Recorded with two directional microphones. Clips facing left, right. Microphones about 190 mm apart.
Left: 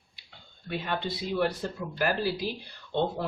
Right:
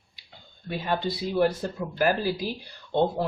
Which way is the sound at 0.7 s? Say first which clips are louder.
Right 4 dB; 40° right (ahead or behind).